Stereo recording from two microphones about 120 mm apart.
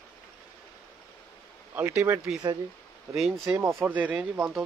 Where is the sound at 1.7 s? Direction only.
20° right (ahead or behind).